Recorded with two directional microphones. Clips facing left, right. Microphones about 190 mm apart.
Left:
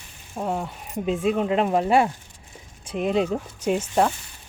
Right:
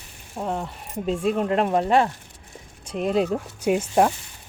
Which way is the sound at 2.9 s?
Centre (ahead or behind).